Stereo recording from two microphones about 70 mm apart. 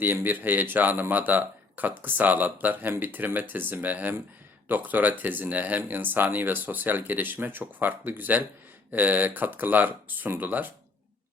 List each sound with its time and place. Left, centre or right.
0.0 s speech: right